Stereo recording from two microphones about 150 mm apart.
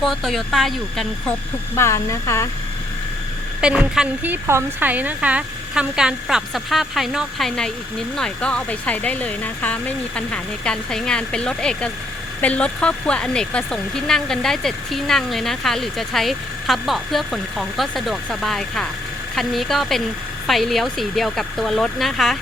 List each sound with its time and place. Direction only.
0.0 s a woman's voice: centre (ahead or behind)
1.7 s a woman's voice: 20° left (ahead or behind)
3.6 s a woman's voice: 5° right (ahead or behind)